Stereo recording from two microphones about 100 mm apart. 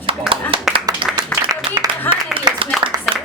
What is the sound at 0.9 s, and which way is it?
Applause, 40° right (ahead or behind).